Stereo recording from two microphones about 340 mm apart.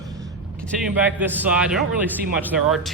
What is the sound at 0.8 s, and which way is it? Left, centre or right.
Speech, centre.